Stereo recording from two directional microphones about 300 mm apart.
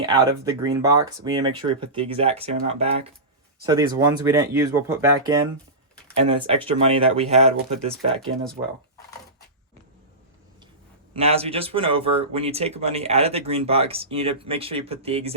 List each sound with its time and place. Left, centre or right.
0.6 s speech: centre
11.1 s speech: centre